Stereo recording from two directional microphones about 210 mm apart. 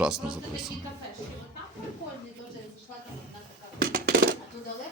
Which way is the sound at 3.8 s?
45° right (ahead or behind).